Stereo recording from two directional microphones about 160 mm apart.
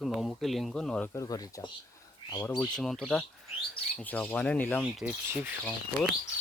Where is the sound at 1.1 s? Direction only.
20° left (ahead or behind).